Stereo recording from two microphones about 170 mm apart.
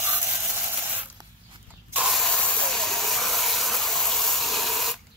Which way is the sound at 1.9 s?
Centre (ahead or behind).